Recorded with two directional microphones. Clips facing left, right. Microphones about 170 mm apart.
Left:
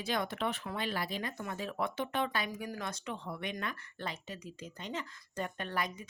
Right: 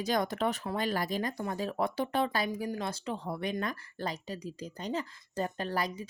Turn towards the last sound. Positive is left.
turn(degrees=-35)  # may be behind; listen again after turning